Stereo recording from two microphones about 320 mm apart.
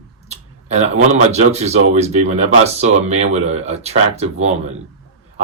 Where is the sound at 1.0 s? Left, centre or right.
Centre.